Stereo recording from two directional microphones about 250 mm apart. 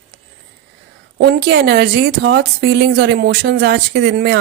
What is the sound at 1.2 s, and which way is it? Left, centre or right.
Speech, right.